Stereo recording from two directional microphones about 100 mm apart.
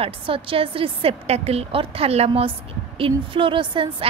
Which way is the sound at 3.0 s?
60° right (ahead or behind).